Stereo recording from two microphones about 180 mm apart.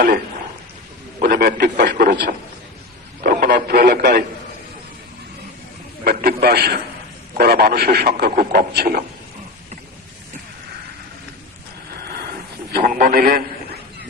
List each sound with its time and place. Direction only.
1.2 s a man's voice: 60° right (ahead or behind)
6.1 s a man's voice: 60° right (ahead or behind)
12.7 s a man's voice: 55° right (ahead or behind)